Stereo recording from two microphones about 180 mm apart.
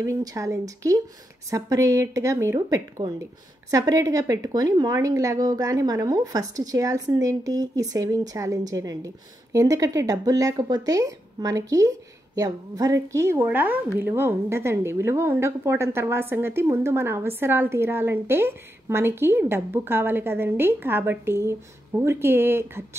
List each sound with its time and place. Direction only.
0.0 s a woman's voice: 20° right (ahead or behind)